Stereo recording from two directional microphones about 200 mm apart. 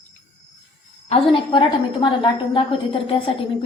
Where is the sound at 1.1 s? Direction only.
25° left (ahead or behind).